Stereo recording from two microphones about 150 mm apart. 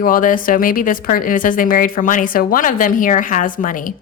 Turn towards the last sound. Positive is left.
turn(degrees=65)  # may be behind; listen again after turning